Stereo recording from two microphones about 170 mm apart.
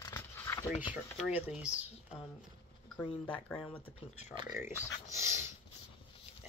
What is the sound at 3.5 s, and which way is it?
Speech, 5° left (ahead or behind).